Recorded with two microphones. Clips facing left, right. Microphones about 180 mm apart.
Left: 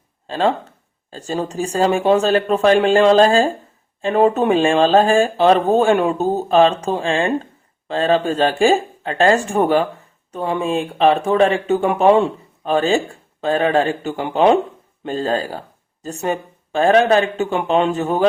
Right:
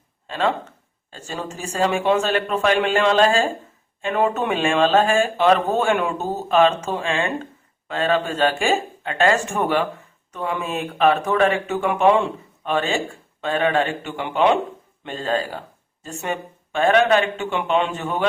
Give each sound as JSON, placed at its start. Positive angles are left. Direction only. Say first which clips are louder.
{"t": 0.3, "sound": "speech", "louder": "left 4 dB", "side_deg": 35}